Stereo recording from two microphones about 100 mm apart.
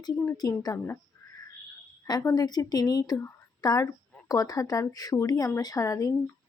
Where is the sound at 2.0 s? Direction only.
40° left (ahead or behind).